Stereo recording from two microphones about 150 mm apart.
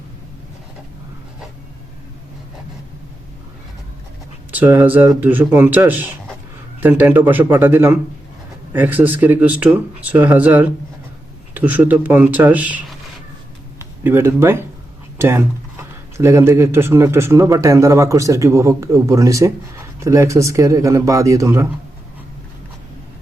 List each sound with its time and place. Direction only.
4.5 s speech: 10° right (ahead or behind)